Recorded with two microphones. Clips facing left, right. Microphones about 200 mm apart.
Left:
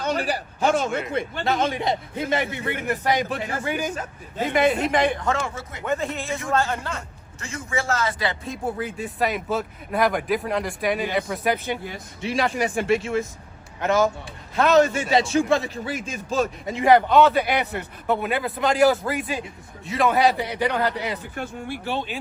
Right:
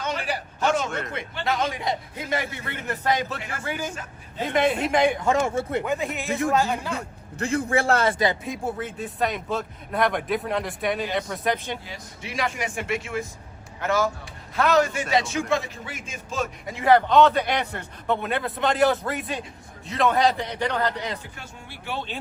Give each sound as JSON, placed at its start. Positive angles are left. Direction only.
{"t": 0.0, "sound": "a man's voice", "side_deg": 35}
{"t": 0.9, "sound": "a man's voice", "side_deg": 5}
{"t": 1.1, "sound": "speech", "side_deg": 45}
{"t": 1.5, "sound": "a man's voice", "side_deg": 25}
{"t": 4.5, "sound": "a man's voice", "side_deg": 0}
{"t": 7.3, "sound": "a man's voice", "side_deg": -60}
{"t": 8.8, "sound": "a man's voice", "side_deg": 0}
{"t": 12.2, "sound": "a man's voice", "side_deg": 30}
{"t": 16.6, "sound": "a man's voice", "side_deg": 15}
{"t": 21.3, "sound": "speech", "side_deg": 55}